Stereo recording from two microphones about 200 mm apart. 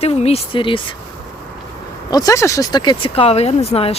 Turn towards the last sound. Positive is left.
turn(degrees=30)  # may be behind; listen again after turning